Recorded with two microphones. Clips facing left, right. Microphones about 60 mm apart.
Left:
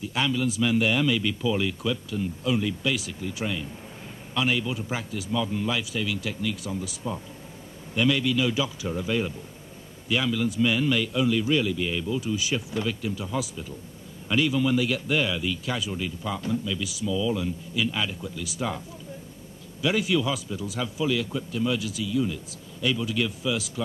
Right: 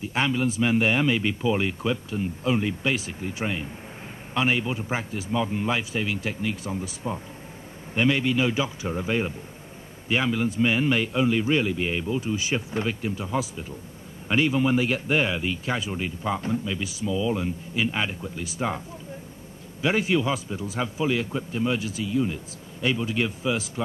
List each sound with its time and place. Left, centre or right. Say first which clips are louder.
0.0 s a man's voice: right 1 dB; right
19.8 s a man's voice: right 1 dB; right